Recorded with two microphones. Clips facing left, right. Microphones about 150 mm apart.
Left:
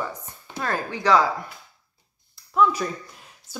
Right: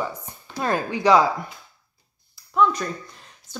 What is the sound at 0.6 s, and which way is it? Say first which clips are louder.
Speech: right 4 dB; 15° right (ahead or behind).